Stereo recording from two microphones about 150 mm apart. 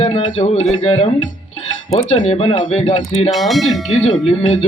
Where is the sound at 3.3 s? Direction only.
Centre (ahead or behind).